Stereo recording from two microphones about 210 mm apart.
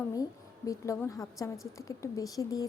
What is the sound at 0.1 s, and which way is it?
A woman's voice, 15° left (ahead or behind).